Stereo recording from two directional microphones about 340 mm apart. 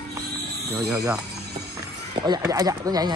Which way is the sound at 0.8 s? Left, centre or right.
Centre.